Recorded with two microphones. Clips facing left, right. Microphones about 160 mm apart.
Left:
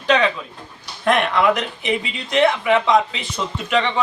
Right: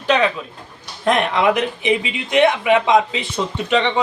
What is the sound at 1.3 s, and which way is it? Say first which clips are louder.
Speech: right 1 dB; 15° right (ahead or behind).